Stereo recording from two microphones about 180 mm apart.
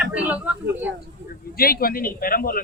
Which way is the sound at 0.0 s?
10° right (ahead or behind).